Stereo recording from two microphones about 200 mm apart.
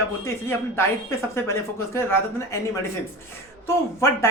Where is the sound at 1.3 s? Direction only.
15° left (ahead or behind).